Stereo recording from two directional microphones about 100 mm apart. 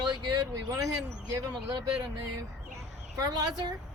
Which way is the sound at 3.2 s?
40° right (ahead or behind).